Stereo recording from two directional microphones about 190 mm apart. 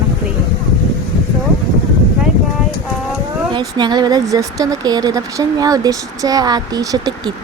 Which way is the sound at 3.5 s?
20° right (ahead or behind).